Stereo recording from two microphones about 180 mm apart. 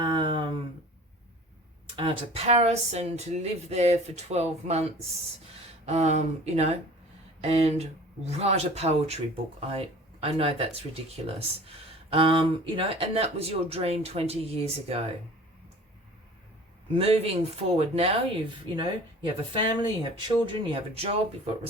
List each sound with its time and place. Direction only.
0.0 s a sound: 30° right (ahead or behind)
2.0 s speech: 30° right (ahead or behind)
16.9 s speech: 35° right (ahead or behind)